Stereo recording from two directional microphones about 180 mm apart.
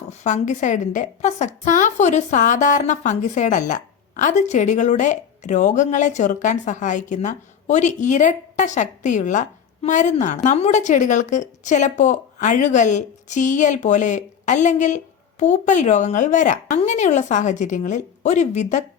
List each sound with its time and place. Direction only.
0.1 s a woman's voice: 40° left (ahead or behind)